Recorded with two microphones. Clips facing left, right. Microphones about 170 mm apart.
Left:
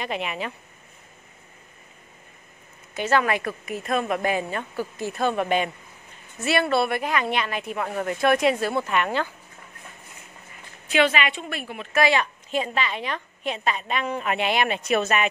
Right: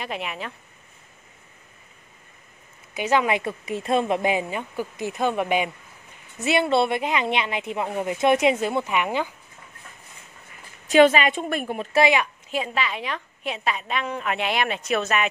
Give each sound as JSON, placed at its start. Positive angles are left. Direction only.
{"t": 0.0, "sound": "a woman's voice", "side_deg": 0}
{"t": 2.9, "sound": "a woman's voice", "side_deg": -15}
{"t": 10.9, "sound": "a woman's voice", "side_deg": -40}
{"t": 12.0, "sound": "a woman's voice", "side_deg": -15}